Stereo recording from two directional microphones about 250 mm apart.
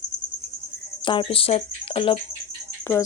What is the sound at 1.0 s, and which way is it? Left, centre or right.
Speech, centre.